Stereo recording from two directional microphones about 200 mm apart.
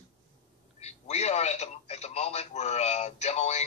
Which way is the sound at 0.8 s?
35° left (ahead or behind).